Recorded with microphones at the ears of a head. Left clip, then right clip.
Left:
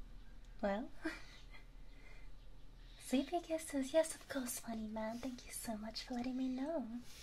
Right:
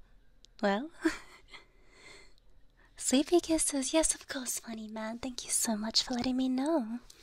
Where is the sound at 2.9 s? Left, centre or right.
Right.